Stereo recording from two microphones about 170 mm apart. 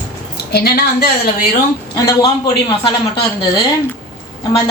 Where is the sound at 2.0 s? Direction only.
25° left (ahead or behind).